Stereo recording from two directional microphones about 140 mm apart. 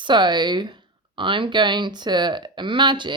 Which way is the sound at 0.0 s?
35° right (ahead or behind).